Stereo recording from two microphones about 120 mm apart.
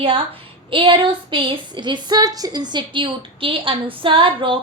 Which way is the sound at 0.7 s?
45° right (ahead or behind).